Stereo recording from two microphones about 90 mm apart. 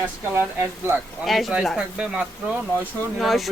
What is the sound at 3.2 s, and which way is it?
Speech, centre (ahead or behind).